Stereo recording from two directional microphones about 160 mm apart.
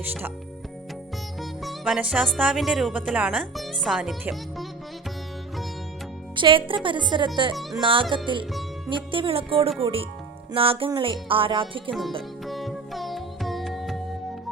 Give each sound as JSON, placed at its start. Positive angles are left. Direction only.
{"t": 0.0, "sound": "speech", "side_deg": -10}
{"t": 1.4, "sound": "music", "side_deg": 0}
{"t": 2.4, "sound": "speech", "side_deg": -5}
{"t": 6.3, "sound": "music", "side_deg": -30}
{"t": 7.5, "sound": "speech", "side_deg": 0}
{"t": 7.8, "sound": "music", "side_deg": -30}
{"t": 12.5, "sound": "music", "side_deg": 0}